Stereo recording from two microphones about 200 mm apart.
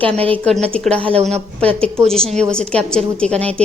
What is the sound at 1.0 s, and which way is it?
Speech, 30° right (ahead or behind).